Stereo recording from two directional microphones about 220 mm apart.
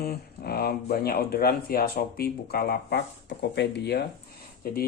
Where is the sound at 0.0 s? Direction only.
45° left (ahead or behind).